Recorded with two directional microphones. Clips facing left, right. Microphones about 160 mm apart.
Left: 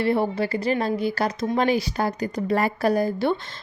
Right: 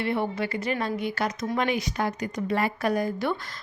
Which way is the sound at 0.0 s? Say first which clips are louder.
Left 5 dB; 35° left (ahead or behind).